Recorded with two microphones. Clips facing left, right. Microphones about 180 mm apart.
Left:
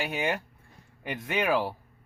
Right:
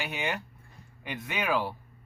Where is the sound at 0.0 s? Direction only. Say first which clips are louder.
Left 4 dB; 40° left (ahead or behind).